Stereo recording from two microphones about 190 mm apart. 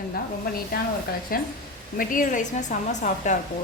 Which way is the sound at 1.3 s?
50° left (ahead or behind).